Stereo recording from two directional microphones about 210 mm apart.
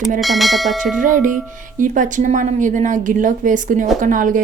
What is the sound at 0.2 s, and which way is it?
Speech, centre (ahead or behind).